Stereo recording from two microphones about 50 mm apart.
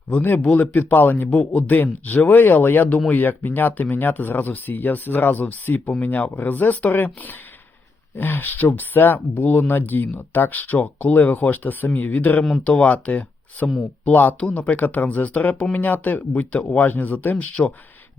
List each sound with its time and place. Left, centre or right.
0.2 s speech: left
0.7 s speech: left
1.3 s speech: left
16.3 s speech: left
16.8 s speech: left